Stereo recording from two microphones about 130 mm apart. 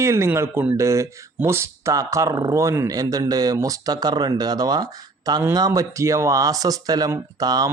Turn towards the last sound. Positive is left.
turn(degrees=-30)  # may be behind; listen again after turning